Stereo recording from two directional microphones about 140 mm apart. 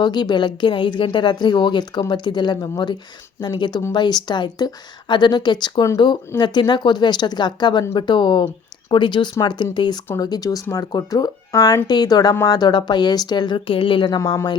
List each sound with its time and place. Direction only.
0.0 s speech: 30° left (ahead or behind)
14.2 s speech: 25° left (ahead or behind)